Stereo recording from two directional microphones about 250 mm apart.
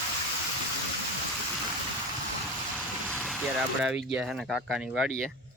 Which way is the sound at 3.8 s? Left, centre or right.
Centre.